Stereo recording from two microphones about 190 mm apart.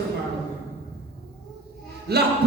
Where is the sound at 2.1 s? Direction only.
60° right (ahead or behind).